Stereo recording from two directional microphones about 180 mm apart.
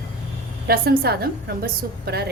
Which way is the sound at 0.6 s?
55° right (ahead or behind).